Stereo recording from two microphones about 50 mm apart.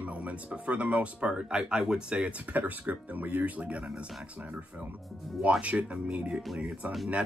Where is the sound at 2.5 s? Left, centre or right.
Right.